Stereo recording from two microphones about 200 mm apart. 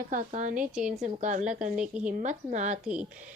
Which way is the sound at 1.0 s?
40° right (ahead or behind).